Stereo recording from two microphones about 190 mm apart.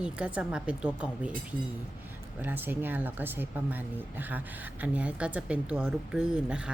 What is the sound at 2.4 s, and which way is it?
Speech, 10° right (ahead or behind).